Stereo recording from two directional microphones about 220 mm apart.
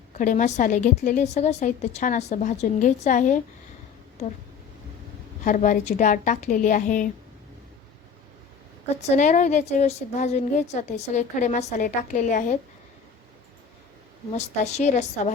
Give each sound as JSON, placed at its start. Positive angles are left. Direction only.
{"t": 0.1, "sound": "a woman's voice", "side_deg": 35}
{"t": 5.5, "sound": "a woman's voice", "side_deg": 35}
{"t": 9.0, "sound": "a woman's voice", "side_deg": 35}
{"t": 14.3, "sound": "a woman's voice", "side_deg": 30}